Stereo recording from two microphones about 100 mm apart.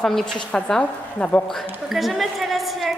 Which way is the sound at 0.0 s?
5° left (ahead or behind).